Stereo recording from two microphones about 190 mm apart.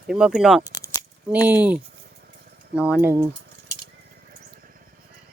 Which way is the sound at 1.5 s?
10° right (ahead or behind).